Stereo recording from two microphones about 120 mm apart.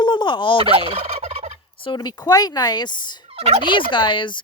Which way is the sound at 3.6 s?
45° left (ahead or behind).